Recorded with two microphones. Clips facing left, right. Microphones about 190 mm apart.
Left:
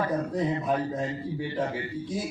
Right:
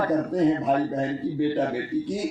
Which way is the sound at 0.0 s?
50° right (ahead or behind).